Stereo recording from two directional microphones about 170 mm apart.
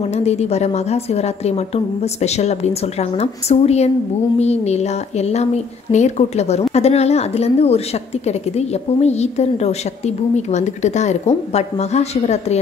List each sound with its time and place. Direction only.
0.1 s a woman's voice: 40° left (ahead or behind)